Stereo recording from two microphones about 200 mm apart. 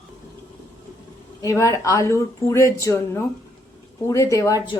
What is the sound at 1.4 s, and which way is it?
Speech, 15° left (ahead or behind).